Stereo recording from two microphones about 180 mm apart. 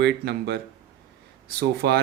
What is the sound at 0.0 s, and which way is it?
Speech, 70° right (ahead or behind).